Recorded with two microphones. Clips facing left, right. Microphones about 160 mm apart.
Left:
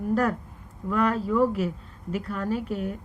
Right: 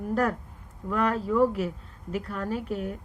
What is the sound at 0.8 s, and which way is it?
Speech, 40° right (ahead or behind).